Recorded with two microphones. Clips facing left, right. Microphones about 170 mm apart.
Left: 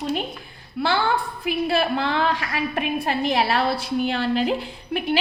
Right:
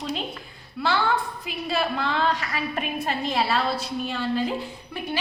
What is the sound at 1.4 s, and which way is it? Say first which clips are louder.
A woman's voice: left 5 dB; 70° left (ahead or behind).